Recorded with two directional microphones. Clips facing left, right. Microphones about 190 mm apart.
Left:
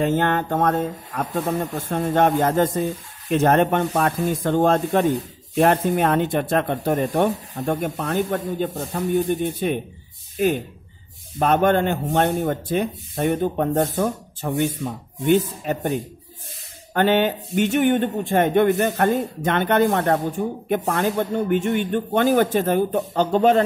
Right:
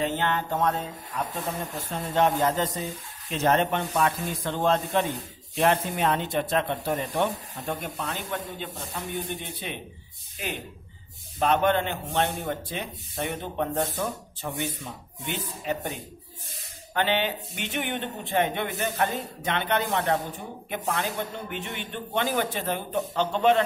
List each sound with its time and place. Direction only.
0.0 s speech: 50° left (ahead or behind)